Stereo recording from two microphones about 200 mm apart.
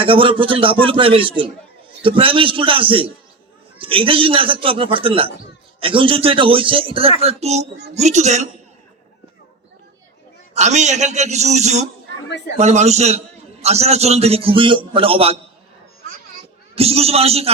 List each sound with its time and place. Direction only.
0.0 s a man's voice: 25° right (ahead or behind)
10.5 s a man's voice: 35° right (ahead or behind)
16.7 s a man's voice: 30° right (ahead or behind)